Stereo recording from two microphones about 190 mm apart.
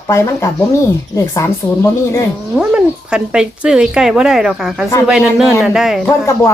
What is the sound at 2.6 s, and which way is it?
Speech, 5° right (ahead or behind).